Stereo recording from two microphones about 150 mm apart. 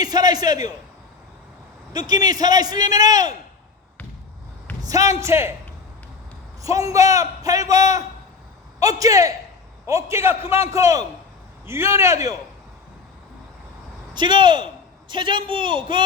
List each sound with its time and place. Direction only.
0.0 s a man's voice: 25° right (ahead or behind)
1.9 s a man's voice: 25° right (ahead or behind)
4.9 s a man's voice: 20° right (ahead or behind)
6.6 s a man's voice: 20° right (ahead or behind)
14.1 s a man's voice: 30° right (ahead or behind)